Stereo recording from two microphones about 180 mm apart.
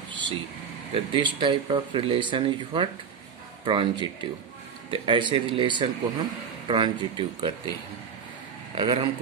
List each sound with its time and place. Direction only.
0.1 s vehicle: 25° right (ahead or behind)
0.9 s speech: 25° right (ahead or behind)
8.7 s speech: 25° right (ahead or behind)